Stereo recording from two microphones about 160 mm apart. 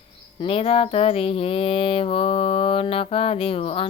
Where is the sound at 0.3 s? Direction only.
35° left (ahead or behind).